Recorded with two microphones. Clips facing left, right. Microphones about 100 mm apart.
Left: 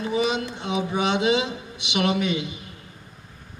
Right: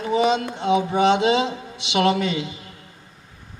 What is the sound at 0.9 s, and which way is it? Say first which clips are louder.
Speech: right 2 dB; 30° right (ahead or behind).